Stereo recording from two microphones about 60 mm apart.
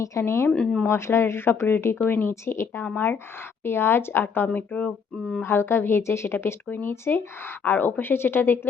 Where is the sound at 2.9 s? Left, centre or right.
Left.